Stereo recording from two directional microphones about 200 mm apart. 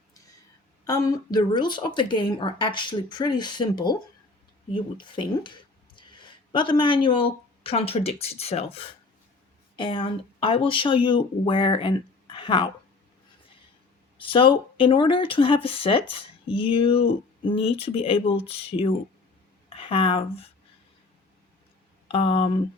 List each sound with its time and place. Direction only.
0.9 s speech: 15° left (ahead or behind)
14.2 s speech: 25° left (ahead or behind)
22.1 s speech: 30° left (ahead or behind)